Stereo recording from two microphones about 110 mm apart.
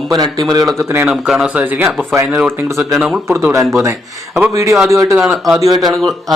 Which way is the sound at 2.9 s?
10° right (ahead or behind).